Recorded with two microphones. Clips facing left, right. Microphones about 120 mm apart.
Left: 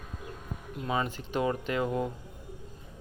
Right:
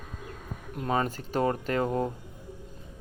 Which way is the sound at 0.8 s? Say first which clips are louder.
Right 3 dB; 45° right (ahead or behind).